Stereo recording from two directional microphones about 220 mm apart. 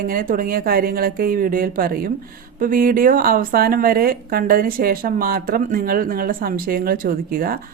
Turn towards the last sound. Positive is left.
turn(degrees=-40)  # may be behind; listen again after turning